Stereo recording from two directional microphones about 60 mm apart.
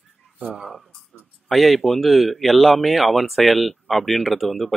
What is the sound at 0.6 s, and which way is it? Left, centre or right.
Speech, centre.